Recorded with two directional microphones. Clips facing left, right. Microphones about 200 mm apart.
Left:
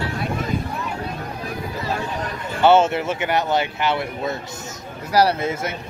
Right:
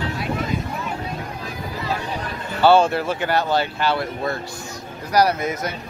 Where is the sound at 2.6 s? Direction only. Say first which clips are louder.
Even; 20° left (ahead or behind).